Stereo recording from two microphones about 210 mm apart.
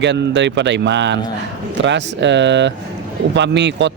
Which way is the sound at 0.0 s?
55° right (ahead or behind).